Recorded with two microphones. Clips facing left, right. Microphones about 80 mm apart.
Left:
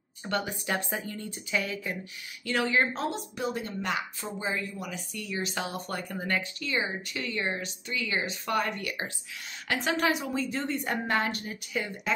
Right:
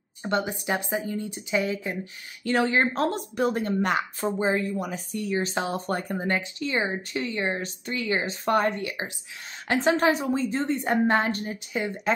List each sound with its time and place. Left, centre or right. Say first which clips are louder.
0.2 s speech: right 5 dB; right
2.4 s speech: right 4 dB; right
2.9 s speech: right 6 dB; right
7.6 s speech: right 5 dB; right